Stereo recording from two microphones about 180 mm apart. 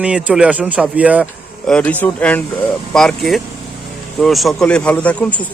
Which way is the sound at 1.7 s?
5° left (ahead or behind).